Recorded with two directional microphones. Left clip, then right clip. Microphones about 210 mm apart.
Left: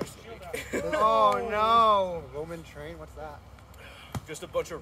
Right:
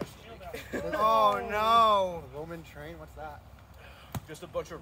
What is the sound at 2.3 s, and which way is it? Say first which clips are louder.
Speech: left 4 dB; 15° right (ahead or behind).